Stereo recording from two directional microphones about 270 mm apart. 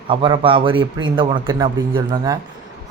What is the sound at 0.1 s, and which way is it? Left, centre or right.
Speech, centre.